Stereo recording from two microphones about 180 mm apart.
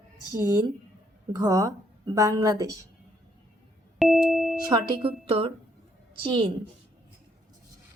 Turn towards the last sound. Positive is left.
turn(degrees=-30)  # may be behind; listen again after turning